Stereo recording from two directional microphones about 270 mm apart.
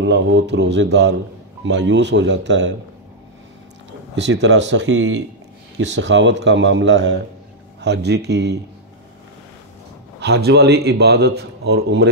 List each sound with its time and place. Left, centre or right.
0.0 s speech: right
4.1 s speech: right
10.2 s speech: right